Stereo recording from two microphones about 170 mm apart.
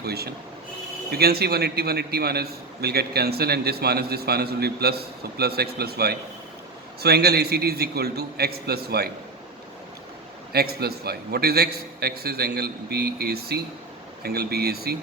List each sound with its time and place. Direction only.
0.0 s a man's voice: 70° right (ahead or behind)
10.5 s a man's voice: 65° right (ahead or behind)